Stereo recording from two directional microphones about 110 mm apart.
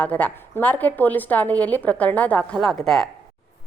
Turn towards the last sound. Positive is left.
turn(degrees=0)  # may be behind; listen again after turning